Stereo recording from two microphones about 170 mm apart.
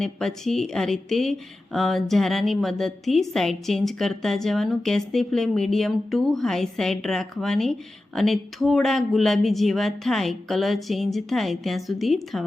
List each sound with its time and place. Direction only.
0.0 s speech: centre (ahead or behind)